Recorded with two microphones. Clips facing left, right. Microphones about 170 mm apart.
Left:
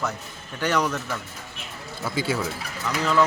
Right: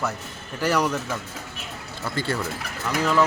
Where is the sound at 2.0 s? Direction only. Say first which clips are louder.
Left 1 dB; 5° left (ahead or behind).